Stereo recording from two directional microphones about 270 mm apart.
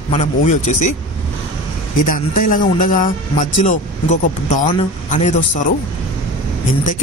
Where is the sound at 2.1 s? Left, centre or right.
Left.